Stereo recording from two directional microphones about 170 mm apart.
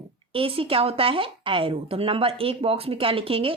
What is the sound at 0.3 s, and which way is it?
Speech, 35° right (ahead or behind).